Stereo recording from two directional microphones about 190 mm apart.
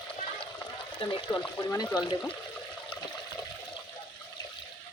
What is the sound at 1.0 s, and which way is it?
Speech, 25° left (ahead or behind).